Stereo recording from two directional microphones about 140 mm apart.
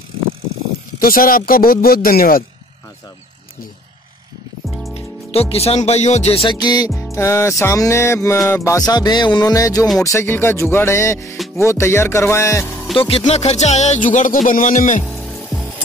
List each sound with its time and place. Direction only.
0.9 s speech: 90° left
4.9 s speech: 45° left (ahead or behind)
6.6 s music: 30° left (ahead or behind)
12.9 s speech: 40° left (ahead or behind)
13.2 s speech: 50° left (ahead or behind)